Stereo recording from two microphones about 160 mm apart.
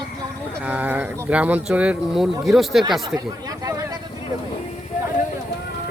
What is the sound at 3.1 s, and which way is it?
Speech, 25° right (ahead or behind).